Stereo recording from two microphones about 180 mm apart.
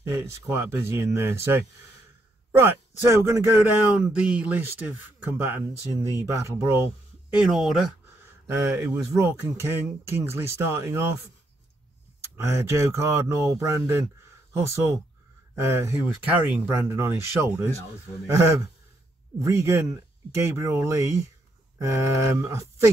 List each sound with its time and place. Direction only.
0.1 s a man's voice: 15° right (ahead or behind)
3.5 s a man's voice: 5° right (ahead or behind)
7.3 s speech: centre (ahead or behind)
8.5 s a man's voice: 15° right (ahead or behind)
12.4 s a man's voice: 15° right (ahead or behind)